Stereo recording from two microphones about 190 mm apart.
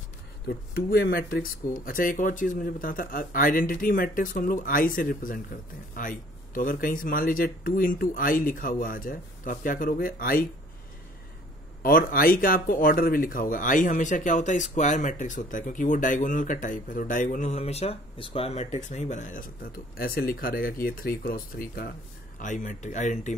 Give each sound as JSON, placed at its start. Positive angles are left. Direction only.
{"t": 0.5, "sound": "speech", "side_deg": 55}
{"t": 11.8, "sound": "speech", "side_deg": 50}